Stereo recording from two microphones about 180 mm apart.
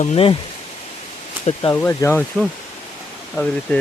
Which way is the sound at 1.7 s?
15° left (ahead or behind).